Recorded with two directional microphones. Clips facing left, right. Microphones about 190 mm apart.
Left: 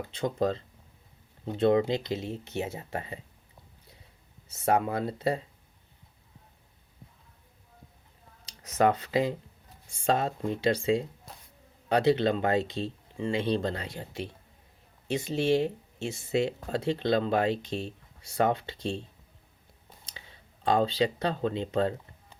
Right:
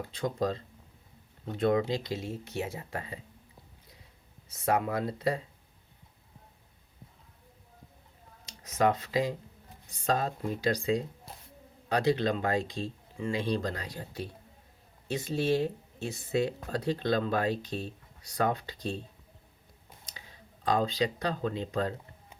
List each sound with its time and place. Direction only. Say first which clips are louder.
0.1 s speech: left 3 dB; 25° left (ahead or behind)
4.4 s speech: left 2 dB; 25° left (ahead or behind)
8.4 s speech: left 2 dB; 30° left (ahead or behind)
11.9 s speech: left 3 dB; 25° left (ahead or behind)
20.7 s speech: left 3 dB; 30° left (ahead or behind)